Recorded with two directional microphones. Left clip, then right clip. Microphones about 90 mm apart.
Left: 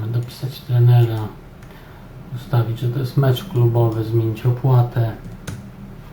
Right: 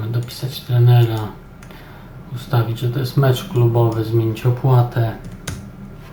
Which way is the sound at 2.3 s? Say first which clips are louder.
Right 3 dB; 10° right (ahead or behind).